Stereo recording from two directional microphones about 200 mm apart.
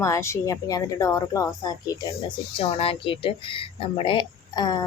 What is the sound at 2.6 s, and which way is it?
Speech, 30° left (ahead or behind).